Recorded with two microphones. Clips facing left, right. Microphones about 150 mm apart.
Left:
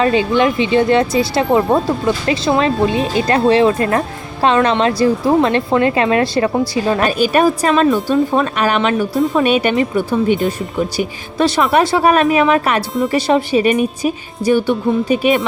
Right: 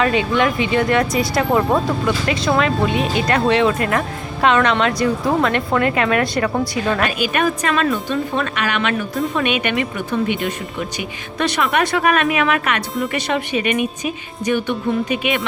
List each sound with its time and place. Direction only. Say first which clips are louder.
0.0 s a woman's voice: left 3 dB; 30° left (ahead or behind)
7.9 s speech: left 7 dB; 5° left (ahead or behind)
8.3 s speech: left 6 dB; 40° left (ahead or behind)